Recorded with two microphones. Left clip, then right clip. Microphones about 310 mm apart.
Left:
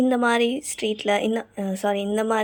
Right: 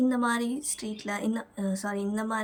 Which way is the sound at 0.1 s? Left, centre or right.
Centre.